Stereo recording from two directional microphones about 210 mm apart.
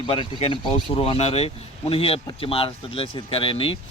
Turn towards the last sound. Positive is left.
turn(degrees=25)  # may be behind; listen again after turning